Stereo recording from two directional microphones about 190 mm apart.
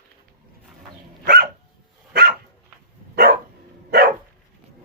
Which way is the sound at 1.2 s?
50° right (ahead or behind).